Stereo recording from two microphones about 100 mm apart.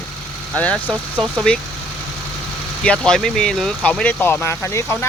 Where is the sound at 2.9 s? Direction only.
5° left (ahead or behind); by 5.1 s 25° left (ahead or behind).